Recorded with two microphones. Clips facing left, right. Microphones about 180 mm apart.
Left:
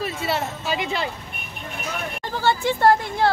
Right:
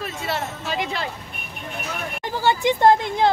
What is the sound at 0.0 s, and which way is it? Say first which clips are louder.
Speech: left 2 dB; 5° left (ahead or behind).